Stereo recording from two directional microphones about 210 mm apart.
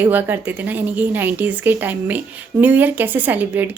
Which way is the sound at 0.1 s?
10° right (ahead or behind).